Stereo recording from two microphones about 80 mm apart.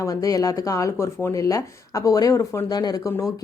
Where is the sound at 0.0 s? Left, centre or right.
Left.